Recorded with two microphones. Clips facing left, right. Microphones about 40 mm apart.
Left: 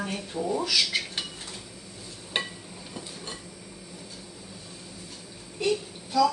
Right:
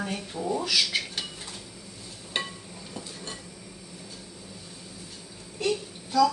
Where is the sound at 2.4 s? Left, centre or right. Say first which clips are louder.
Left 1 dB; centre.